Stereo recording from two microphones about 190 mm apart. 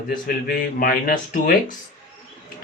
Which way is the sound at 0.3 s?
50° left (ahead or behind).